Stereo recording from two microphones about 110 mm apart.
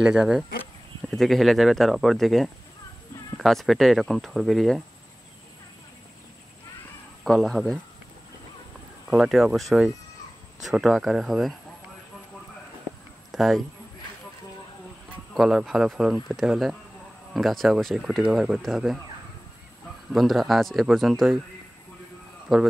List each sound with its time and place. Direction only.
0.1 s speech: 5° right (ahead or behind)
7.2 s speech: 5° left (ahead or behind)
9.1 s speech: 5° right (ahead or behind)
13.3 s speech: centre (ahead or behind)
15.3 s speech: centre (ahead or behind)
20.1 s speech: centre (ahead or behind)
22.5 s speech: centre (ahead or behind)